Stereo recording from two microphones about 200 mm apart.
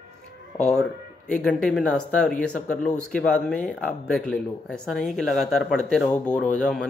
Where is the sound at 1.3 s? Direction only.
5° left (ahead or behind).